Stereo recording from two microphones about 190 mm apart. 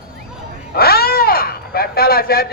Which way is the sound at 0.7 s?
55° left (ahead or behind).